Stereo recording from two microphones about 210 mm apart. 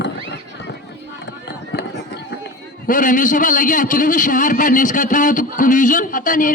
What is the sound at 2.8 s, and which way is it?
A man's voice, 40° left (ahead or behind).